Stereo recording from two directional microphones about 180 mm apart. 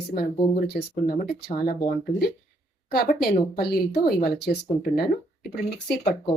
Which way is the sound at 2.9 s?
55° left (ahead or behind).